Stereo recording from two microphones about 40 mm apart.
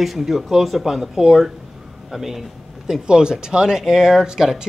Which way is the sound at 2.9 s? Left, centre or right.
Centre.